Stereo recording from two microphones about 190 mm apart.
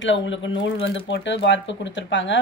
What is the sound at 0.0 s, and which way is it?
Speech, 75° left (ahead or behind).